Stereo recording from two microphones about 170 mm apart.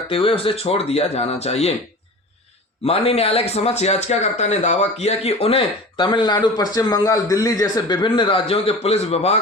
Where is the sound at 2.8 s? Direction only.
35° left (ahead or behind).